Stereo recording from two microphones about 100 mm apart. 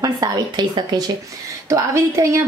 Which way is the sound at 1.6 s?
30° right (ahead or behind).